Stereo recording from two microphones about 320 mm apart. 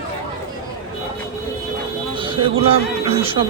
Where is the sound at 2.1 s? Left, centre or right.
Centre.